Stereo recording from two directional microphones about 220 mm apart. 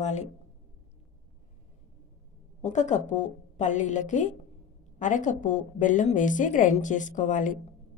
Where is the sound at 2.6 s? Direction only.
35° left (ahead or behind).